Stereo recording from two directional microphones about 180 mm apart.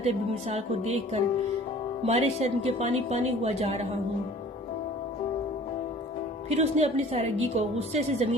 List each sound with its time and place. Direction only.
0.0 s a woman's voice: 35° right (ahead or behind)
6.5 s a woman's voice: 35° right (ahead or behind)